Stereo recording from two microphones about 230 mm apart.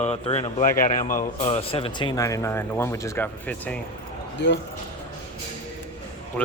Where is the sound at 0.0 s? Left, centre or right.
Left.